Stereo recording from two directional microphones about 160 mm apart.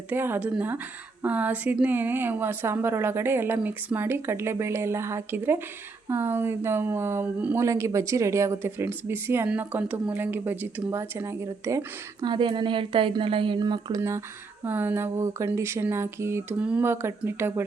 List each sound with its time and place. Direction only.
0.1 s speech: 10° right (ahead or behind)
12.2 s a woman's voice: 30° right (ahead or behind)
14.6 s speech: 10° right (ahead or behind)